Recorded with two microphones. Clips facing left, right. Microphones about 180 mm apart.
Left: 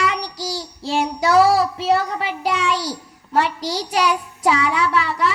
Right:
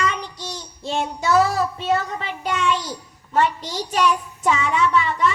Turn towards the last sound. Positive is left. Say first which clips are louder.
# right 1 dB
turn(degrees=90)